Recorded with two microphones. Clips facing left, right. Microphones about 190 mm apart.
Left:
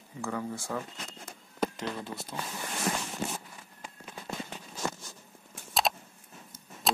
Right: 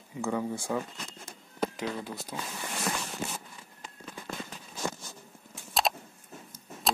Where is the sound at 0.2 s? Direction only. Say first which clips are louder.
Right 4 dB; 20° right (ahead or behind).